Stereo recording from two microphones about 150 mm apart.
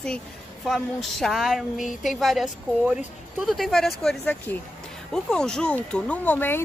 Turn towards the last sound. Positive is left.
turn(degrees=10)  # may be behind; listen again after turning